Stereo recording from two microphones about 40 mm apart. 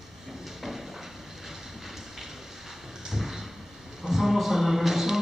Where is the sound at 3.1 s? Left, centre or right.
Centre.